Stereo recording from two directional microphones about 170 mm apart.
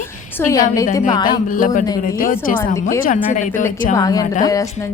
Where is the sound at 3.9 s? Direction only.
20° left (ahead or behind).